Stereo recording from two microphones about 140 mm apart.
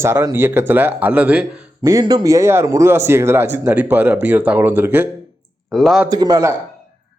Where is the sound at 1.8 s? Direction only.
25° right (ahead or behind).